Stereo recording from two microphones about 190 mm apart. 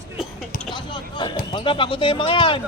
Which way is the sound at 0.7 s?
25° left (ahead or behind).